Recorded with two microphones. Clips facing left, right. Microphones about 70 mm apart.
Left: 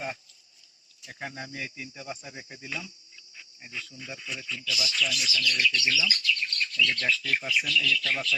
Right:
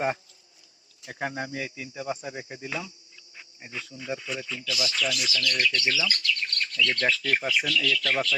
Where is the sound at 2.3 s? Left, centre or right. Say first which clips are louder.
Right 6 dB; right.